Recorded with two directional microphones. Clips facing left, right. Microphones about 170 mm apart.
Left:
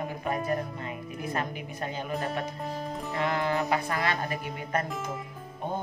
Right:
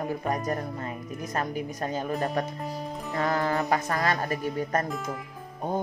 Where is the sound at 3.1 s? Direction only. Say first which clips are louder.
Right 2 dB; 40° right (ahead or behind).